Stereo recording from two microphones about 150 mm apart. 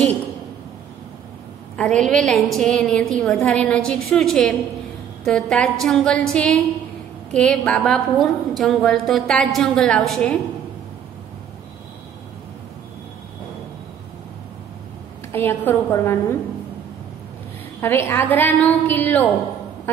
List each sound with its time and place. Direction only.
1.8 s a woman's voice: 5° left (ahead or behind)
15.3 s a woman's voice: 15° left (ahead or behind)
17.7 s a woman's voice: 15° left (ahead or behind)